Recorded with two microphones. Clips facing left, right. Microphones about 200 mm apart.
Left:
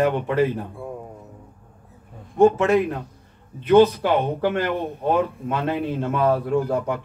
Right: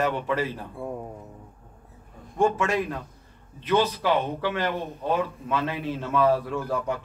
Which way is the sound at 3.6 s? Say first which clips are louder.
Left 8 dB; 55° left (ahead or behind).